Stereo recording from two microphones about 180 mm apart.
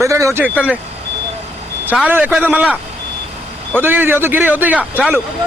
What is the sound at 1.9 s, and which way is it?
A man's voice, 10° right (ahead or behind).